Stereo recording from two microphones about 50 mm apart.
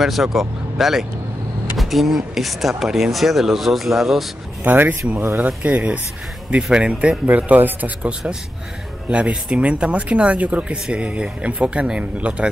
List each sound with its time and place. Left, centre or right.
0.0 s speech: centre
4.8 s speech: right
7.2 s speech: right
9.6 s speech: right